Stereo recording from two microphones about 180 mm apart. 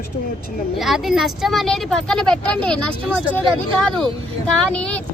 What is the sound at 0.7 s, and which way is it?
Speech, centre (ahead or behind).